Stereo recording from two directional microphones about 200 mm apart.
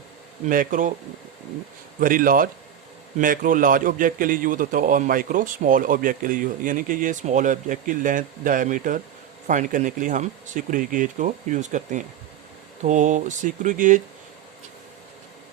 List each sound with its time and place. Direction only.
0.4 s a man's voice: 40° right (ahead or behind)
2.0 s a man's voice: 45° right (ahead or behind)